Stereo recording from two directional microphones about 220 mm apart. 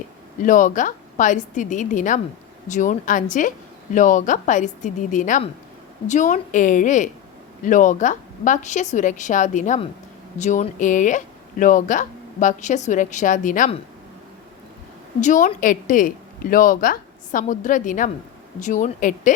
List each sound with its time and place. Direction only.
0.4 s a woman's voice: 35° left (ahead or behind)
15.2 s a woman's voice: 35° left (ahead or behind)